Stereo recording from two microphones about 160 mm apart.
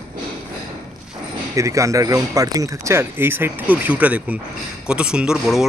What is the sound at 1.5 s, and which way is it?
Speech, 20° right (ahead or behind).